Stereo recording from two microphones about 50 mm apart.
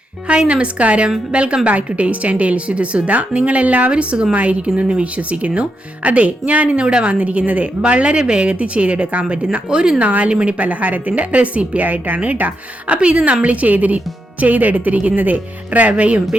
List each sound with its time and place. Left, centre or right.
0.3 s speech: right
10.1 s speech: right